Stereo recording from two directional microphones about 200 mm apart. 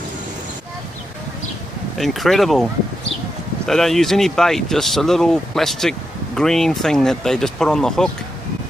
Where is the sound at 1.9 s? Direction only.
Centre (ahead or behind).